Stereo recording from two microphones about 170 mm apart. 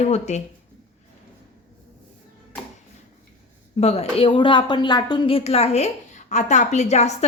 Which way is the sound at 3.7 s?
40° left (ahead or behind).